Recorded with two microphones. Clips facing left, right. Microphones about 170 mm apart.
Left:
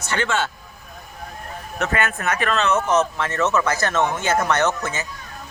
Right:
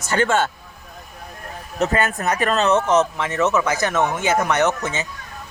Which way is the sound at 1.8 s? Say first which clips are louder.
Right 3 dB; 35° right (ahead or behind).